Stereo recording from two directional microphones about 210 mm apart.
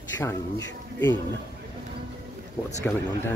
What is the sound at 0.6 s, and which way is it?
Speech, 60° left (ahead or behind).